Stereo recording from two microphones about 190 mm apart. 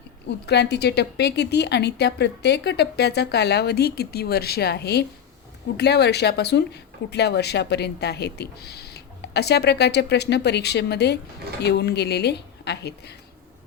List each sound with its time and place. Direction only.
0.3 s speech: 60° left (ahead or behind)